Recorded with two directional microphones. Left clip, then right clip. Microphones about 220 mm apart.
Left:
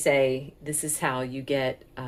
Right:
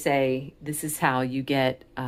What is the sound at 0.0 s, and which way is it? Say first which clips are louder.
Speech: left 1 dB; 25° right (ahead or behind).